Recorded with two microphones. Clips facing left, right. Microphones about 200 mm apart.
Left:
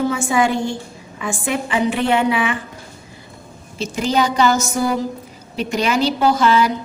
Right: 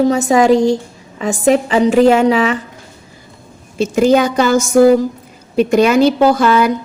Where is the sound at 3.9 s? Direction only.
50° right (ahead or behind).